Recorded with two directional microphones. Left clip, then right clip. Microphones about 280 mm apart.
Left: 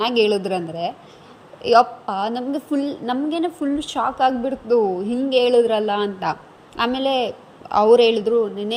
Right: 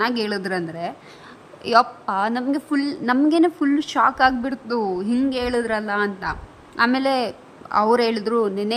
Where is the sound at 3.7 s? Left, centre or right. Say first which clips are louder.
Right 3 dB; centre.